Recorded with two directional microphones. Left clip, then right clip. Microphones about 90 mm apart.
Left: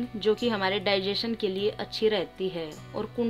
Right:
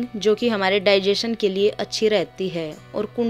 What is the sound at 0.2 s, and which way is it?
A woman's voice, 50° right (ahead or behind).